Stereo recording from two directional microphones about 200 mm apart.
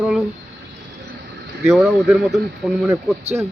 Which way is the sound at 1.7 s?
Centre (ahead or behind).